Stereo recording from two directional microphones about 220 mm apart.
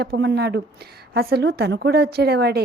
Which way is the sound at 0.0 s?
50° right (ahead or behind).